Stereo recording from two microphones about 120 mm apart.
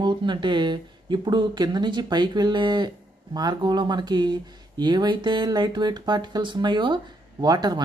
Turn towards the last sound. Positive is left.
turn(degrees=-35)  # may be behind; listen again after turning